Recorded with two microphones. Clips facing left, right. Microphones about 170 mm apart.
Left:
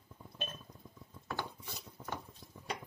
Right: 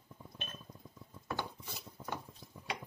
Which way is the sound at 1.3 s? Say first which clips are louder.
Right 1 dB; 5° right (ahead or behind).